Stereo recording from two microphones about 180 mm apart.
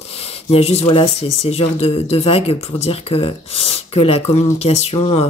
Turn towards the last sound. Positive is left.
turn(degrees=35)  # may be behind; listen again after turning